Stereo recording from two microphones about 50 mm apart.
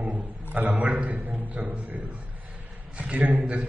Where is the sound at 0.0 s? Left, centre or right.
Right.